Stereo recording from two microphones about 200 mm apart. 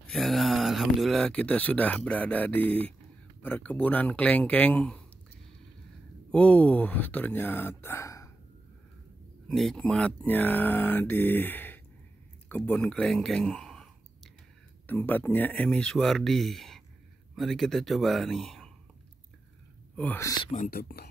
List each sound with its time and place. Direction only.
0.0 s speech: centre (ahead or behind)
6.3 s speech: 5° left (ahead or behind)
9.5 s speech: centre (ahead or behind)
12.4 s clicking: 10° left (ahead or behind)
14.9 s speech: 10° left (ahead or behind)
20.0 s speech: 10° left (ahead or behind)
20.5 s speech: 45° left (ahead or behind)